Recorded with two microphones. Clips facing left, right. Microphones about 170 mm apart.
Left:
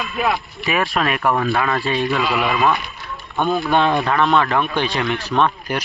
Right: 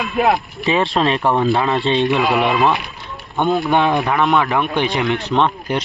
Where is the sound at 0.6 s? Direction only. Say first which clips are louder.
Right 3 dB; 25° right (ahead or behind).